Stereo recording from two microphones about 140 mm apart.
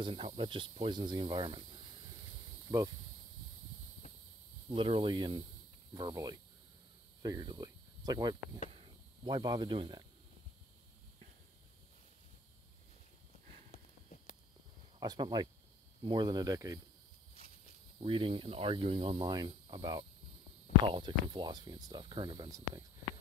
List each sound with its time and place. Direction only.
0.0 s speech: 40° right (ahead or behind)
4.6 s speech: 40° right (ahead or behind)
14.0 s a sound: 60° left (ahead or behind)
15.0 s speech: 30° right (ahead or behind)
18.0 s speech: 40° right (ahead or behind)